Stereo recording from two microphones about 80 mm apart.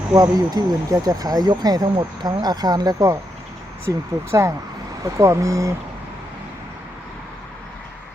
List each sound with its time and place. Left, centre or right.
0.1 s speech: right
3.8 s speech: right